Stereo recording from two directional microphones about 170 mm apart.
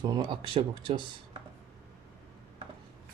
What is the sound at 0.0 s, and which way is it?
Speech, 25° right (ahead or behind).